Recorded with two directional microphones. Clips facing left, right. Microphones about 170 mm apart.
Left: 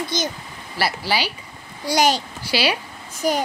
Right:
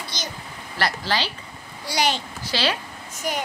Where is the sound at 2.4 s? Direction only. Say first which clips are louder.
Left 2 dB; 10° left (ahead or behind).